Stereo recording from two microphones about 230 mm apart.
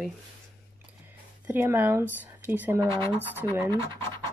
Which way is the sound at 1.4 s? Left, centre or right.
Centre.